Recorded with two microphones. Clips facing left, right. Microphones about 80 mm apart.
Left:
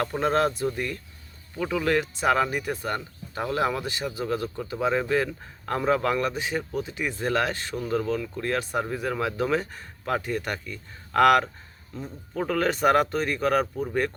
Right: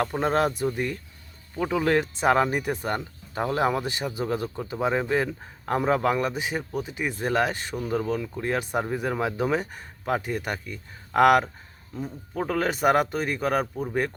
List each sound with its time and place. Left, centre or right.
0.0 s speech: centre